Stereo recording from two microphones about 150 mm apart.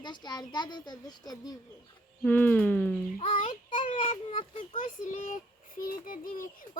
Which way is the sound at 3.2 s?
50° left (ahead or behind).